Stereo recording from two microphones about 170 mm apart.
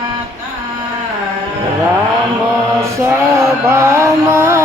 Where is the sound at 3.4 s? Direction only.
15° right (ahead or behind).